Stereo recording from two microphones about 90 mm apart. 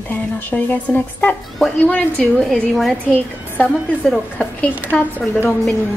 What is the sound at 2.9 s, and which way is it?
A woman's voice, 20° left (ahead or behind).